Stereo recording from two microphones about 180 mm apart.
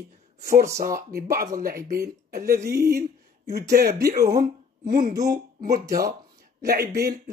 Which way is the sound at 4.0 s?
55° right (ahead or behind).